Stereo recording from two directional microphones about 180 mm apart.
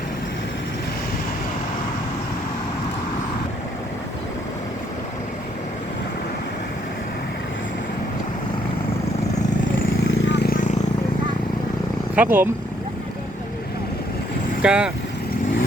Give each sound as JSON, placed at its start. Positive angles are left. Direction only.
{"t": 10.2, "sound": "vehicle", "side_deg": 80}
{"t": 12.1, "sound": "speech", "side_deg": -10}
{"t": 14.6, "sound": "speech", "side_deg": -5}